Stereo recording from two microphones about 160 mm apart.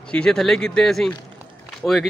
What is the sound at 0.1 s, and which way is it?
Speech, 5° left (ahead or behind).